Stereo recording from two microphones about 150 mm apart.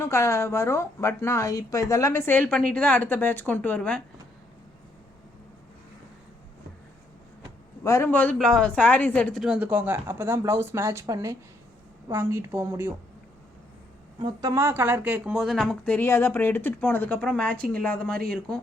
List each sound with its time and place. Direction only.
0.0 s speech: 20° left (ahead or behind)
7.9 s speech: 15° left (ahead or behind); by 12.9 s 15° right (ahead or behind)
14.2 s speech: 25° right (ahead or behind); by 18.2 s 10° left (ahead or behind)